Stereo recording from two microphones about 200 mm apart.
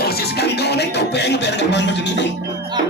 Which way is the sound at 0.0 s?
50° left (ahead or behind).